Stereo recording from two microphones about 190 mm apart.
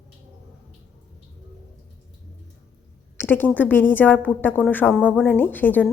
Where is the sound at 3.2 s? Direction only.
10° left (ahead or behind).